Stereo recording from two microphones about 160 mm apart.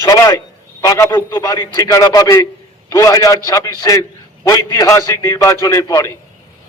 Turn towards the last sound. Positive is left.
turn(degrees=20)  # may be behind; listen again after turning